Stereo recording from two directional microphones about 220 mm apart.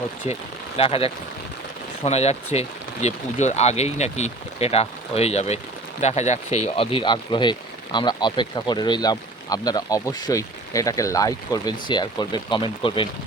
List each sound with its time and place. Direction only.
0.3 s speech: 30° left (ahead or behind)